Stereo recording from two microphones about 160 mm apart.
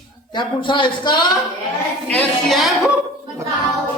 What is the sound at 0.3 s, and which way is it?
Speech, 30° left (ahead or behind).